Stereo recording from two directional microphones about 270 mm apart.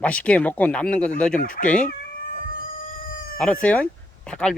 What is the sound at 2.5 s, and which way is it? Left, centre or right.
Cat, left.